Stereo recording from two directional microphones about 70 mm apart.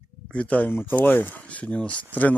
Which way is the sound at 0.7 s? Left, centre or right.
Left.